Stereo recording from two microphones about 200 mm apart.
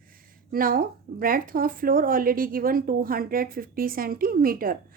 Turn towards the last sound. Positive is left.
turn(degrees=-45)  # may be behind; listen again after turning